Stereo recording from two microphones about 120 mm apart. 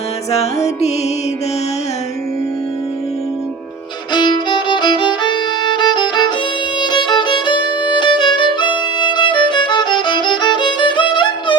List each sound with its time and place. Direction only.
0.3 s music: 65° left (ahead or behind)
4.1 s violin: 40° left (ahead or behind)